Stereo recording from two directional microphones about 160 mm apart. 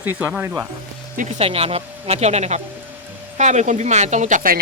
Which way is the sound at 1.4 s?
40° right (ahead or behind).